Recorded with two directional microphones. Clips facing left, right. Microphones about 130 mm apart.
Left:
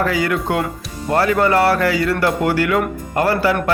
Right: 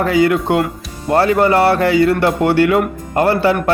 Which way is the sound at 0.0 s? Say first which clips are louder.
Right 5 dB; 25° right (ahead or behind).